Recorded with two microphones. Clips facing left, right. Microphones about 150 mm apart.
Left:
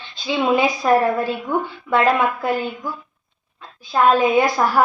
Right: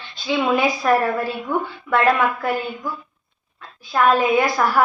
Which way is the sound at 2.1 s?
20° left (ahead or behind).